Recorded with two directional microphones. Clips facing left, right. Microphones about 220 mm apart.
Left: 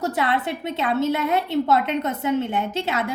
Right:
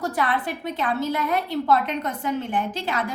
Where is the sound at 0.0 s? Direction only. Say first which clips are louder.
Left 2 dB; 25° left (ahead or behind).